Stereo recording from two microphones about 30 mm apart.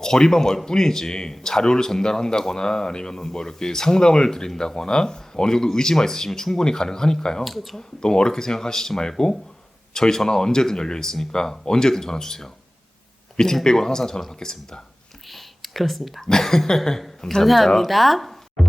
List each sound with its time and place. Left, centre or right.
0.0 s speech: left
7.4 s speech: centre
7.8 s speech: left
13.7 s a sound: centre
14.3 s speech: left
15.3 s whispering: centre
16.2 s a sound: centre
17.4 s speech: centre
17.8 s a sound: centre